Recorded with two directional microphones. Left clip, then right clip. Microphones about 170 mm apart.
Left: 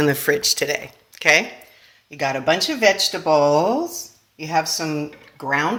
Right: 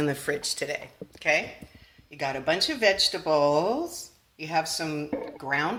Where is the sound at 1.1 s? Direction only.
55° left (ahead or behind).